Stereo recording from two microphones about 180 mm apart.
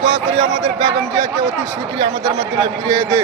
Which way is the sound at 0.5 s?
25° right (ahead or behind).